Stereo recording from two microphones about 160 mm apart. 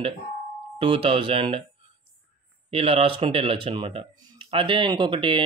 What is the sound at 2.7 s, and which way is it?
Speech, 35° right (ahead or behind).